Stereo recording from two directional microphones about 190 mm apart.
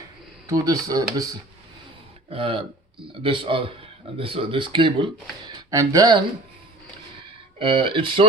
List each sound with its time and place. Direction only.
0.4 s speech: 15° right (ahead or behind)
2.3 s speech: 30° right (ahead or behind)
7.6 s speech: 25° right (ahead or behind)